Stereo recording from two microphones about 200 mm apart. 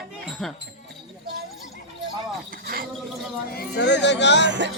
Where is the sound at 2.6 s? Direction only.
45° right (ahead or behind).